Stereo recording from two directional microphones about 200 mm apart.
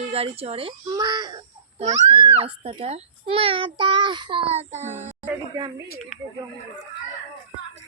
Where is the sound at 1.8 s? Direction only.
25° right (ahead or behind).